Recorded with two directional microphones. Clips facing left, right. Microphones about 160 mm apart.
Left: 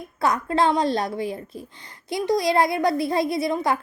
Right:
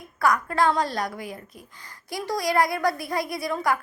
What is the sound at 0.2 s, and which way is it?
A child's voice, 25° left (ahead or behind).